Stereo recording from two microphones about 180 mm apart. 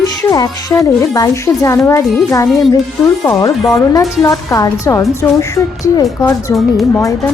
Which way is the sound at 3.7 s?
20° left (ahead or behind).